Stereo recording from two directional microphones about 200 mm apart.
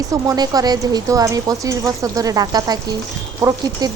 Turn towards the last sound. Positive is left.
turn(degrees=-20)  # may be behind; listen again after turning